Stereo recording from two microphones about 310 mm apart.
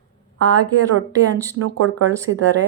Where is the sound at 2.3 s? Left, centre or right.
Right.